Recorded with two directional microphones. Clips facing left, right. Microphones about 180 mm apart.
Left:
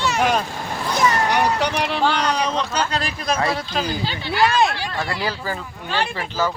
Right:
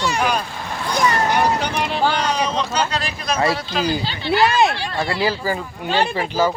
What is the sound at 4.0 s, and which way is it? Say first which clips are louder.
Speech: left 1 dB; 15° left (ahead or behind).